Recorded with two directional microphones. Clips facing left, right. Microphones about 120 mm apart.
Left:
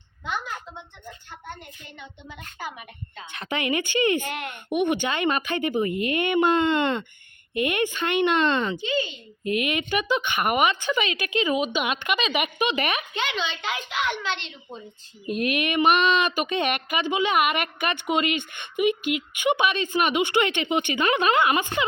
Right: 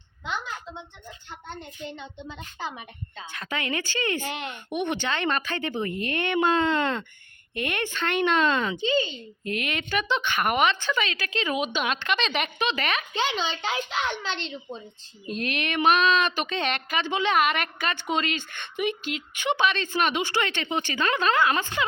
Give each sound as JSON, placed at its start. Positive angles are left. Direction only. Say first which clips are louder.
{"t": 1.8, "sound": "a woman's voice", "louder": "right 6 dB", "side_deg": -25}
{"t": 3.3, "sound": "speech", "louder": "left 4 dB", "side_deg": 20}
{"t": 9.0, "sound": "a child's voice", "louder": "right 1 dB", "side_deg": -30}
{"t": 9.4, "sound": "speech", "louder": "left 5 dB", "side_deg": 10}
{"t": 11.4, "sound": "speech", "louder": "left 1 dB", "side_deg": 5}
{"t": 13.1, "sound": "a child's voice", "louder": "right 1 dB", "side_deg": -35}
{"t": 15.3, "sound": "speech", "louder": "left 4 dB", "side_deg": 15}